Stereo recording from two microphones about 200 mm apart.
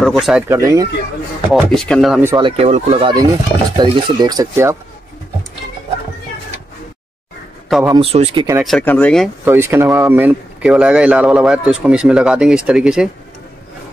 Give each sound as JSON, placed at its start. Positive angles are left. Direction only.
{"t": 0.0, "sound": "speech", "side_deg": 0}
{"t": 0.5, "sound": "speech", "side_deg": -15}
{"t": 1.5, "sound": "speech", "side_deg": 0}
{"t": 2.2, "sound": "speech", "side_deg": -25}
{"t": 7.9, "sound": "speech", "side_deg": -30}
{"t": 8.6, "sound": "speech", "side_deg": 5}
{"t": 9.4, "sound": "speech", "side_deg": -10}